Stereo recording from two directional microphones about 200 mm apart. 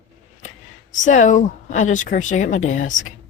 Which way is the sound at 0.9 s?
40° left (ahead or behind).